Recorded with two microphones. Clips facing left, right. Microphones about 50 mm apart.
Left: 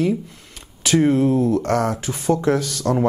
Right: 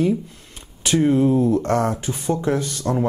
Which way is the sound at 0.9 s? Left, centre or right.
Left.